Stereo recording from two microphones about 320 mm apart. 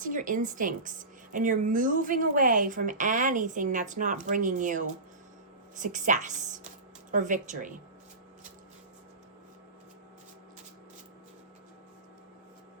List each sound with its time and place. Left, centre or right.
0.0 s a woman's voice: right